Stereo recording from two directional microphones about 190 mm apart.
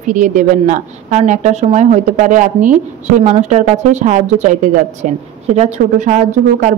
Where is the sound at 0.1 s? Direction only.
40° right (ahead or behind).